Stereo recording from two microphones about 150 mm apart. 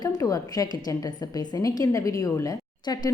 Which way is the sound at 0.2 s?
25° left (ahead or behind).